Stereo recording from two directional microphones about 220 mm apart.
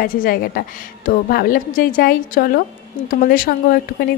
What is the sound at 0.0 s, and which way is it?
A woman's voice, 40° left (ahead or behind).